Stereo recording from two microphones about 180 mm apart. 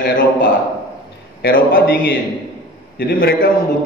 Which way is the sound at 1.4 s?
55° left (ahead or behind).